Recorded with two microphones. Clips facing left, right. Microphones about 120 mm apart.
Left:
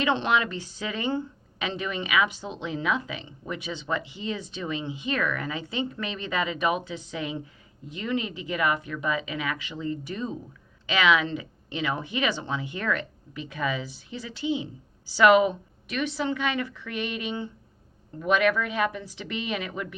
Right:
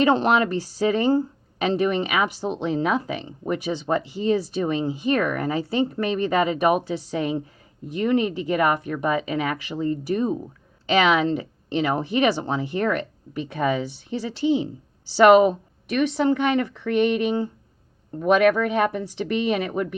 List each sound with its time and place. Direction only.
0.0 s speech: 40° right (ahead or behind)